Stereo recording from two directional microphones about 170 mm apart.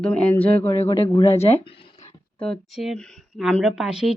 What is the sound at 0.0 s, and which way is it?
Speech, 10° left (ahead or behind).